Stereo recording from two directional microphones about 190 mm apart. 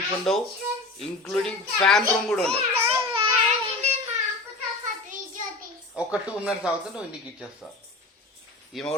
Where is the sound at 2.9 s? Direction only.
25° right (ahead or behind).